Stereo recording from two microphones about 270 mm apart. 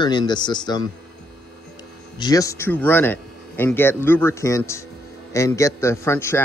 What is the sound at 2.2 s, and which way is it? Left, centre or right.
Speech, centre.